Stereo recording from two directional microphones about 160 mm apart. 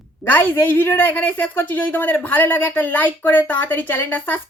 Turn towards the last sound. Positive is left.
turn(degrees=10)  # may be behind; listen again after turning